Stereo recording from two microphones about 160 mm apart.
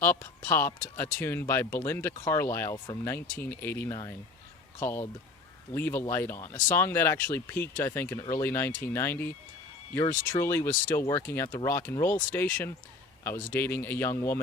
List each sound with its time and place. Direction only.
0.0 s speech: 15° left (ahead or behind)